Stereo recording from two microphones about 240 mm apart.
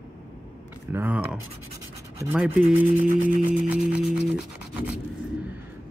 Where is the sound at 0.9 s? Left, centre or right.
Centre.